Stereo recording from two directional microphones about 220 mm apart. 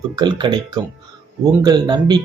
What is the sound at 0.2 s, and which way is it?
Speech, 20° right (ahead or behind).